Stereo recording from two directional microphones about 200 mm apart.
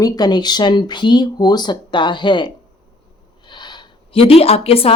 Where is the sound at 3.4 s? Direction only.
20° left (ahead or behind).